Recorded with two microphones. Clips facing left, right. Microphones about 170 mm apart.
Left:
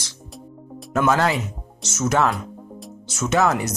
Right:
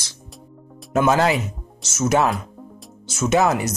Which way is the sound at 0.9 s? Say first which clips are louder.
Right 2 dB; 15° right (ahead or behind).